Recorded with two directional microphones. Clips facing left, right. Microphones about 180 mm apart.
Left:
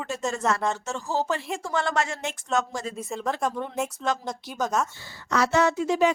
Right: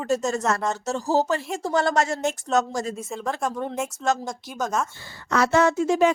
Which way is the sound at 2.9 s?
Centre (ahead or behind).